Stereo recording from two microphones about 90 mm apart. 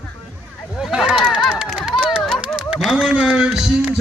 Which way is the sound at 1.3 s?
10° right (ahead or behind).